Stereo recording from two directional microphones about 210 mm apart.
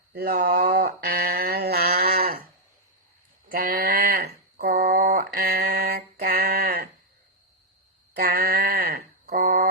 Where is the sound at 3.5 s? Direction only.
45° right (ahead or behind).